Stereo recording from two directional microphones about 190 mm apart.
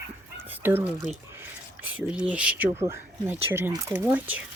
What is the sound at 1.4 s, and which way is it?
Speech, 10° right (ahead or behind).